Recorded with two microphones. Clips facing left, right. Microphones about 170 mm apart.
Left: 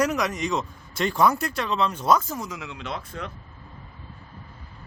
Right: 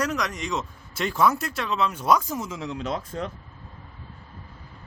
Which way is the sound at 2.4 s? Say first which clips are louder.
Right 2 dB; 25° right (ahead or behind).